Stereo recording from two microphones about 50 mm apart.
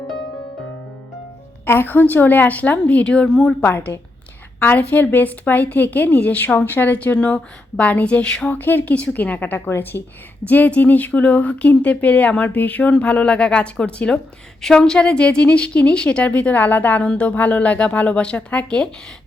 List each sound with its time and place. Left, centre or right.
1.6 s a woman's voice: left
4.6 s a woman's voice: left; by 8.4 s centre
8.4 s a woman's voice: left
10.4 s speech: left
17.0 s speech: left